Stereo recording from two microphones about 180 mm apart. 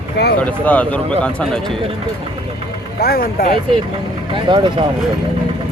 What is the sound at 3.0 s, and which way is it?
Speech, 55° left (ahead or behind).